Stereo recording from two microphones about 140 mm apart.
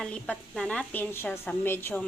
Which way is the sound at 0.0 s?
5° left (ahead or behind).